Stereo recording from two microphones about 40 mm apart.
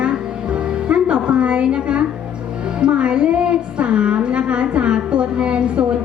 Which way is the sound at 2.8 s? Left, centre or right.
Right.